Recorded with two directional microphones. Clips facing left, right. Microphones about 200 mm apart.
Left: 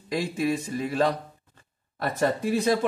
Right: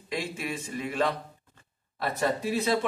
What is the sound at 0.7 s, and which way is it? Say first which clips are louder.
Speech: left 4 dB; 35° left (ahead or behind).